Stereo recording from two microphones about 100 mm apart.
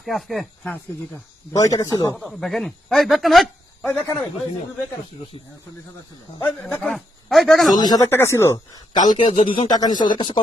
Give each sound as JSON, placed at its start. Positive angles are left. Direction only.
{"t": 0.0, "sound": "a man's voice", "side_deg": 0}
{"t": 1.5, "sound": "speech", "side_deg": 40}
{"t": 2.1, "sound": "a man's voice", "side_deg": 0}
{"t": 3.8, "sound": "a man's voice", "side_deg": 15}
{"t": 6.4, "sound": "a man's voice", "side_deg": 15}
{"t": 7.8, "sound": "speech", "side_deg": 40}
{"t": 8.1, "sound": "speech", "side_deg": 25}
{"t": 8.9, "sound": "speech", "side_deg": 60}
{"t": 9.6, "sound": "speech", "side_deg": 40}